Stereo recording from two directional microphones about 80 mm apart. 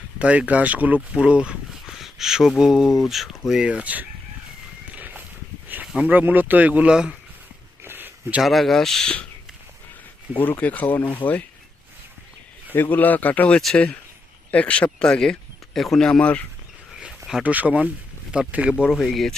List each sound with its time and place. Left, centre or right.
0.2 s speech: centre
3.5 s speech: centre
4.9 s a sound: right
5.8 s a sound: centre
6.1 s speech: centre
7.9 s a sound: right
8.4 s speech: centre
10.6 s speech: left
12.7 s speech: left
17.0 s a sound: centre
17.4 s speech: centre
19.0 s speech: centre